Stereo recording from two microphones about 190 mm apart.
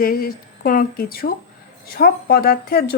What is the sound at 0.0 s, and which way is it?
A woman's voice, 50° left (ahead or behind).